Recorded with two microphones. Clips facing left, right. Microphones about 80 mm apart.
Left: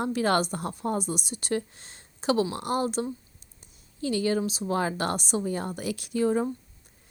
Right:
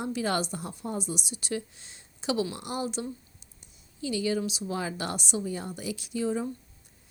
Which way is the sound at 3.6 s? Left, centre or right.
Left.